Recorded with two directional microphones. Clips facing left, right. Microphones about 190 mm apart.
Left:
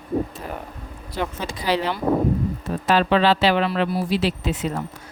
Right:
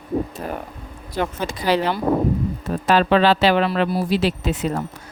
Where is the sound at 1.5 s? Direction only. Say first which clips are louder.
Right 3 dB; 50° right (ahead or behind).